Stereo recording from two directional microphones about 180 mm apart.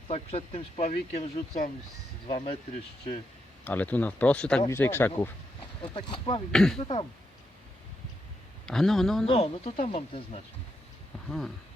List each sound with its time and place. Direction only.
0.1 s speech: 35° left (ahead or behind)
3.6 s speech: 10° left (ahead or behind)
6.1 s speech: 25° left (ahead or behind)
6.5 s a man's voice: centre (ahead or behind)
6.7 s speech: 30° left (ahead or behind)
8.6 s a man's voice: centre (ahead or behind)
9.2 s speech: 30° left (ahead or behind)
11.3 s a man's voice: centre (ahead or behind)